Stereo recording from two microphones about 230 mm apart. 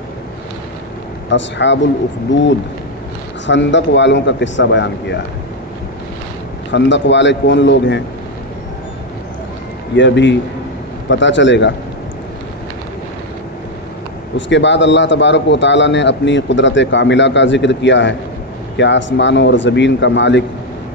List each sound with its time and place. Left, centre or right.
1.3 s a man's voice: left
3.4 s a man's voice: left
6.7 s a man's voice: left
9.9 s a man's voice: left
14.3 s a man's voice: left